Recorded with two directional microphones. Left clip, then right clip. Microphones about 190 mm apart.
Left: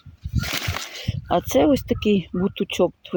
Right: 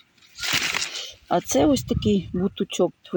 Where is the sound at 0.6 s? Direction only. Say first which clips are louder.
Right 4 dB; 35° left (ahead or behind).